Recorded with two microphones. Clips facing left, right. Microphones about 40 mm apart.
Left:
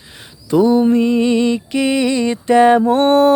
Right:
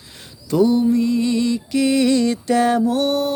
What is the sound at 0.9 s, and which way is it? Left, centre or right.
Music, left.